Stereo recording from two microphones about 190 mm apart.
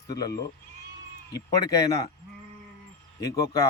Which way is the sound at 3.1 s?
15° left (ahead or behind).